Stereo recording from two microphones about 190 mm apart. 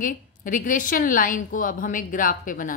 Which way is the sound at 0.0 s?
45° left (ahead or behind).